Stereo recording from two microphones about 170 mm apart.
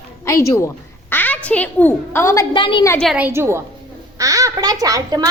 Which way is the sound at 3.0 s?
Centre (ahead or behind).